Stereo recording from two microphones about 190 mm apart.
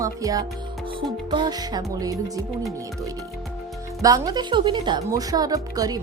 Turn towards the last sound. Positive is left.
turn(degrees=-20)  # may be behind; listen again after turning